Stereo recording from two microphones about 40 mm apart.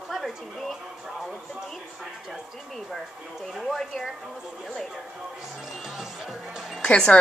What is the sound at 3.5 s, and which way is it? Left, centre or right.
Speech, centre.